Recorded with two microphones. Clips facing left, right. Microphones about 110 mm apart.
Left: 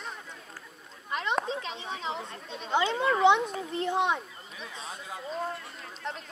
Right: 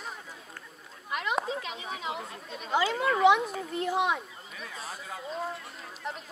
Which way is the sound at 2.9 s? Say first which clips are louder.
Even; 5° right (ahead or behind).